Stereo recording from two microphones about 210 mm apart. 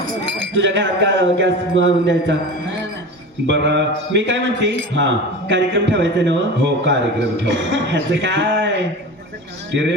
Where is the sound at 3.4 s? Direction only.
55° right (ahead or behind).